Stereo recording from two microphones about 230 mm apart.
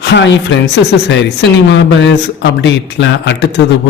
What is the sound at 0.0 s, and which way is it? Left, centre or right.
Speech, left.